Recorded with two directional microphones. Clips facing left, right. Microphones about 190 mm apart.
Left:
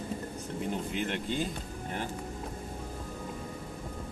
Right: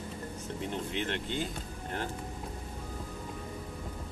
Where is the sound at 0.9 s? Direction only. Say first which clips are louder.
Left 1 dB; 10° left (ahead or behind).